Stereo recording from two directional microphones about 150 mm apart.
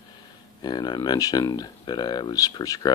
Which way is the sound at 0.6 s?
30° left (ahead or behind).